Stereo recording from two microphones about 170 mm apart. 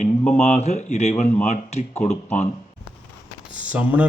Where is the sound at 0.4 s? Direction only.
40° left (ahead or behind).